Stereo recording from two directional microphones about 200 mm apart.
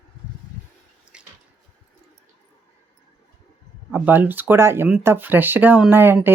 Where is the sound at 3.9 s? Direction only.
10° right (ahead or behind).